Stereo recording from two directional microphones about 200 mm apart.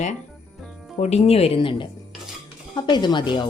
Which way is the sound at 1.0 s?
30° left (ahead or behind).